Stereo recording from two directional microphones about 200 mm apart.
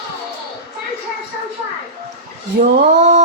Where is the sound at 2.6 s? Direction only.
55° right (ahead or behind).